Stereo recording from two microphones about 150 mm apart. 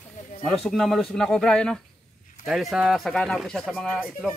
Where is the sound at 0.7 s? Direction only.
Centre (ahead or behind).